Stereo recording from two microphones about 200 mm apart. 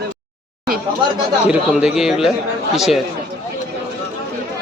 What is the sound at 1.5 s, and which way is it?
Speech, 5° right (ahead or behind).